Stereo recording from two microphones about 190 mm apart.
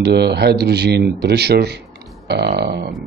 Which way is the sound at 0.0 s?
60° right (ahead or behind).